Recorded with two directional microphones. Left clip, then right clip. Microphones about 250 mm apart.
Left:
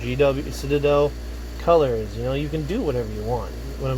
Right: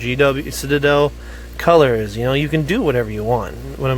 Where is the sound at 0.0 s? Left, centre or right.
Right.